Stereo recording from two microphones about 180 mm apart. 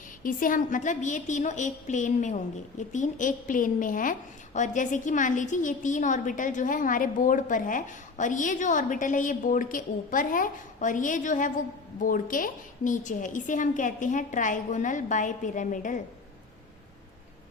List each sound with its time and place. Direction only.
0.2 s a woman's voice: 50° left (ahead or behind)